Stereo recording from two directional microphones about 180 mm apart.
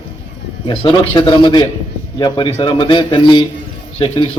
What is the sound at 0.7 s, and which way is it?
A man's voice, 25° left (ahead or behind).